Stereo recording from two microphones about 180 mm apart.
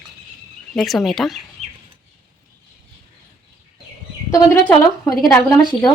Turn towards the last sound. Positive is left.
turn(degrees=25)  # may be behind; listen again after turning